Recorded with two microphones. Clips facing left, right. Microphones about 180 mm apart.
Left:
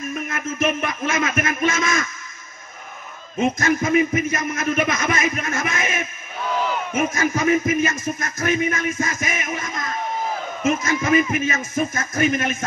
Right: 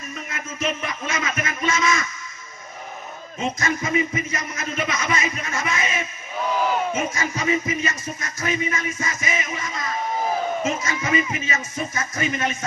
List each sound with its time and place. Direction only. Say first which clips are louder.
0.3 s speech: left 4 dB; 55° left (ahead or behind)
3.3 s music: left 6 dB; 55° left (ahead or behind)
10.8 s speech: left 5 dB; 50° left (ahead or behind)